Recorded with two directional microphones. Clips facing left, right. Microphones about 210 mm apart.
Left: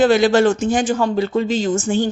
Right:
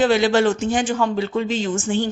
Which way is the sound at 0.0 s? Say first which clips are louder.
Left 3 dB; 45° left (ahead or behind).